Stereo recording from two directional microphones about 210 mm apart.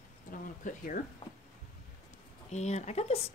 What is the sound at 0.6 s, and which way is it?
Speech, 40° left (ahead or behind).